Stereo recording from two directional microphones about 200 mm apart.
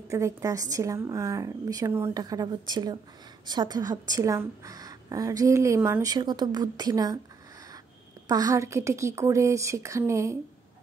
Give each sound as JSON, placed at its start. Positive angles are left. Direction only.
{"t": 0.1, "sound": "a woman's voice", "side_deg": -15}
{"t": 8.3, "sound": "a woman's voice", "side_deg": -20}